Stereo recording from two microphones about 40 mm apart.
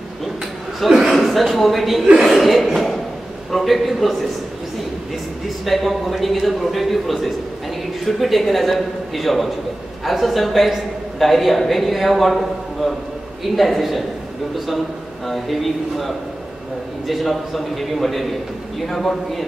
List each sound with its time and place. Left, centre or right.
0.7 s a man's voice: centre
5.7 s a woman's voice: centre
15.2 s a woman's voice: centre